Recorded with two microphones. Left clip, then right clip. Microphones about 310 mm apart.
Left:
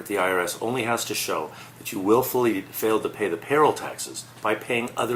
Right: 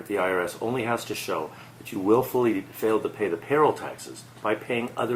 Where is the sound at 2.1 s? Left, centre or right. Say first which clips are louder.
Left 1 dB; right.